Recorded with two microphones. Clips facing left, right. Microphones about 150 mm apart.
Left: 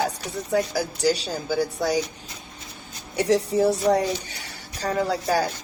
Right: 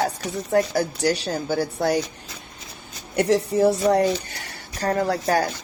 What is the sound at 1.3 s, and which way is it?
Speech, 60° right (ahead or behind).